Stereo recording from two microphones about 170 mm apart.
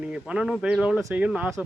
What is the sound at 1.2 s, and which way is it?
Speech, 5° right (ahead or behind).